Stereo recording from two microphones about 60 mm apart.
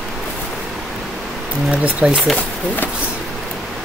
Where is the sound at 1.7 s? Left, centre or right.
Right.